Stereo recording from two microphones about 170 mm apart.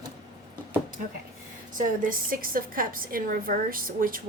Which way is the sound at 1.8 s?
55° right (ahead or behind).